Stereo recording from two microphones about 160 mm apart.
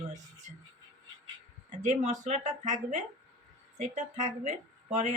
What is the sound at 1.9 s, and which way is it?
Speech, 50° right (ahead or behind).